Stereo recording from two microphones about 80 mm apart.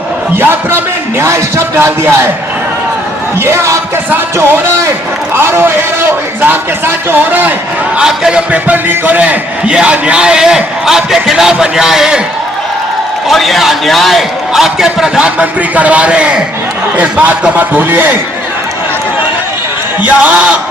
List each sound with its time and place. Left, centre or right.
0.3 s a man's voice: right
3.4 s speech: right
5.3 s a man's voice: right
7.9 s a man's voice: centre
13.2 s a man's voice: centre; by 18.2 s right
20.0 s a man's voice: centre